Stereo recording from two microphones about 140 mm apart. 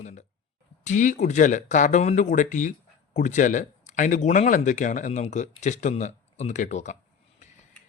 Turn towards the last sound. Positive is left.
turn(degrees=60)  # may be behind; listen again after turning